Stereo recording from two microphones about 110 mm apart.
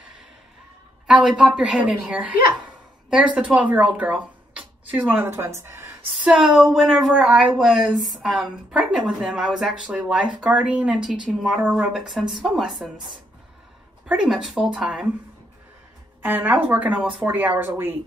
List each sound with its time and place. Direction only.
1.0 s a woman's voice: 5° right (ahead or behind)
3.3 s speech: 10° right (ahead or behind)
6.2 s a woman's voice: 5° right (ahead or behind)
14.0 s a woman's voice: 5° right (ahead or behind)
16.2 s a woman's voice: 15° right (ahead or behind)